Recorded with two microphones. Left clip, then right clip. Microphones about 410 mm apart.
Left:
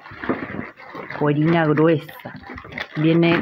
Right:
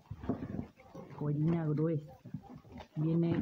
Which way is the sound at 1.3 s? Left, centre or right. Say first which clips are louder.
Left 19 dB; right.